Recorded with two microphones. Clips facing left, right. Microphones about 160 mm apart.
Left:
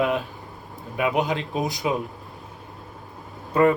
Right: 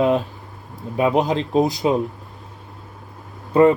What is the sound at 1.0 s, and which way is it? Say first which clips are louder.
Speech: right 5 dB; 35° right (ahead or behind).